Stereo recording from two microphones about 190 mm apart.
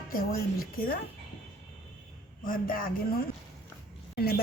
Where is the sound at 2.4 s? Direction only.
50° left (ahead or behind).